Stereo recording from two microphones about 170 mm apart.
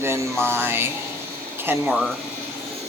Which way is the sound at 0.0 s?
15° right (ahead or behind).